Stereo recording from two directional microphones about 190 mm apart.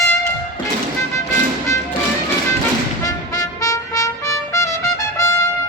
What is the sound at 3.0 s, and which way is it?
Trumpet, 20° left (ahead or behind).